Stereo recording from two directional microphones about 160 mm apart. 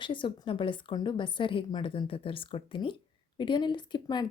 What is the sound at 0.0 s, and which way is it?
Speech, 30° left (ahead or behind).